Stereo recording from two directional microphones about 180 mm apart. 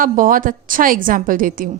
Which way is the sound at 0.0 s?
50° right (ahead or behind).